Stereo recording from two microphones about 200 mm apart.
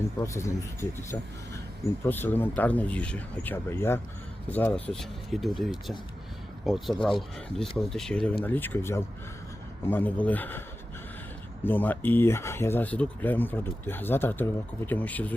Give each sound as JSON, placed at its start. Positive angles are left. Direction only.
{"t": 0.2, "sound": "speech", "side_deg": 15}
{"t": 2.0, "sound": "speech", "side_deg": 10}
{"t": 11.6, "sound": "speech", "side_deg": 10}